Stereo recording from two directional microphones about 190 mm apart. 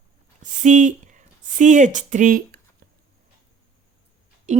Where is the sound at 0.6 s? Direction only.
40° right (ahead or behind).